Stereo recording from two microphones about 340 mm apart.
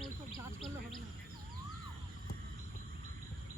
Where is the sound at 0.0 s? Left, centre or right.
Centre.